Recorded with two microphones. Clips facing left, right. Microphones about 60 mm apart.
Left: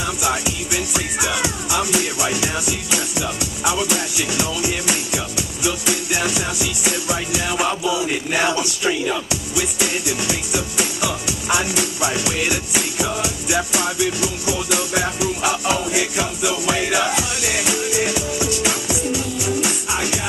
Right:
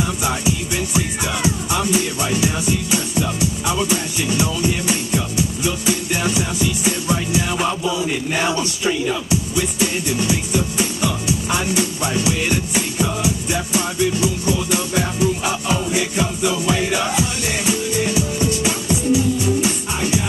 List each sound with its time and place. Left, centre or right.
0.2 s music: centre